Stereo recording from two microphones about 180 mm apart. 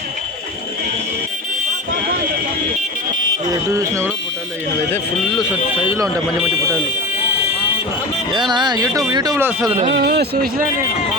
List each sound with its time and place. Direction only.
3.8 s speech: 15° right (ahead or behind)
4.9 s speech: centre (ahead or behind)
6.0 s speech: 20° right (ahead or behind)
8.3 s speech: 25° right (ahead or behind)
9.9 s speech: 65° right (ahead or behind)